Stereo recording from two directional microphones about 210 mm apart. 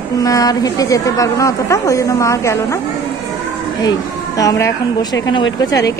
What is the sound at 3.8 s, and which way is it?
A woman's voice, 15° left (ahead or behind).